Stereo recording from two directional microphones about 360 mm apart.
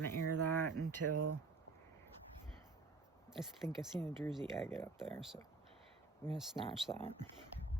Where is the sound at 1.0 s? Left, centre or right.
Right.